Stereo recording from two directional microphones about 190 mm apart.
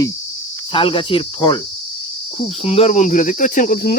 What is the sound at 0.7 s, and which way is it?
Cricket, 30° left (ahead or behind).